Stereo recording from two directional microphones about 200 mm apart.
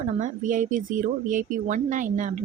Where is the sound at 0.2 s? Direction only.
40° right (ahead or behind).